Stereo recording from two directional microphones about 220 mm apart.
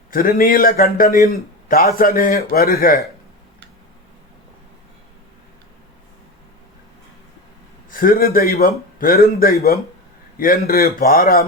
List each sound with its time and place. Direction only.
0.1 s a man's voice: 40° left (ahead or behind)
7.9 s a man's voice: 40° left (ahead or behind)